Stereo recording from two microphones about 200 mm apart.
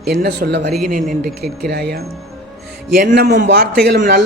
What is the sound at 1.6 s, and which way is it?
A man's voice, 50° right (ahead or behind).